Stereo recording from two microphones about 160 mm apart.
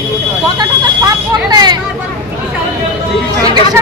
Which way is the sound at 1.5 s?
25° right (ahead or behind).